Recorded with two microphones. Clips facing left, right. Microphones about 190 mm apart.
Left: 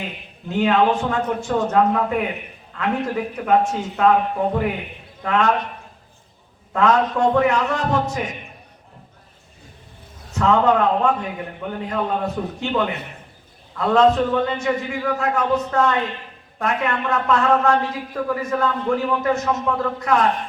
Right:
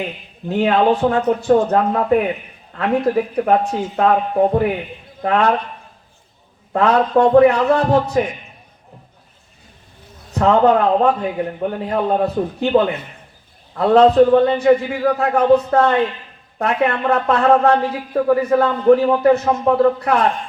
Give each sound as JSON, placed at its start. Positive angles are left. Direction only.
{"t": 0.4, "sound": "a man's voice", "side_deg": -35}
{"t": 6.7, "sound": "a man's voice", "side_deg": -35}
{"t": 10.3, "sound": "a man's voice", "side_deg": -35}